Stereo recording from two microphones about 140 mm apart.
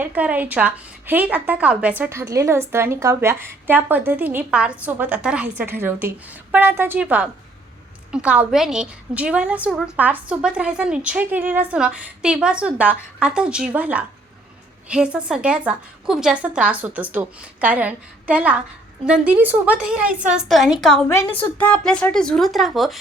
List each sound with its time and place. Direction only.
0.0 s a woman's voice: 10° right (ahead or behind)
21.1 s a woman's voice: 20° left (ahead or behind)
21.6 s speech: 10° left (ahead or behind)